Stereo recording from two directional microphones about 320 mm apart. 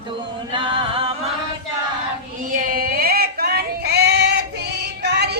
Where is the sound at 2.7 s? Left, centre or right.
Right.